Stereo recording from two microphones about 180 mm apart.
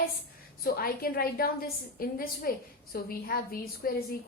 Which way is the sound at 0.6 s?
55° left (ahead or behind).